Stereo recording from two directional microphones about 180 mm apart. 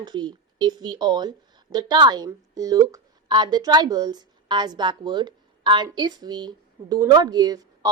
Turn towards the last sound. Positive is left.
turn(degrees=-20)  # may be behind; listen again after turning